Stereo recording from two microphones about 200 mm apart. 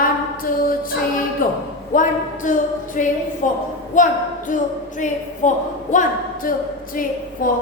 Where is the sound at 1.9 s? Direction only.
40° left (ahead or behind).